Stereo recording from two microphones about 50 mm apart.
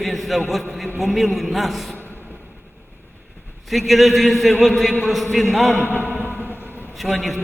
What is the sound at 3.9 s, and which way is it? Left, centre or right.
A man's voice, centre.